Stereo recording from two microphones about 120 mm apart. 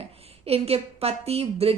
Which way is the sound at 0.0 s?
55° right (ahead or behind).